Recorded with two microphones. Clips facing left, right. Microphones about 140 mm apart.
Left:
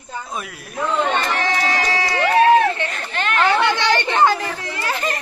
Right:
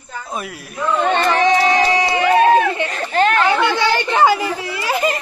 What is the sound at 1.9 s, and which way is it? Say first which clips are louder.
Run: right 4 dB; 20° right (ahead or behind).